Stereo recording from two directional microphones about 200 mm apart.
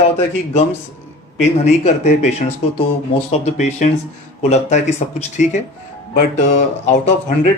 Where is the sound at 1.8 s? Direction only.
35° left (ahead or behind).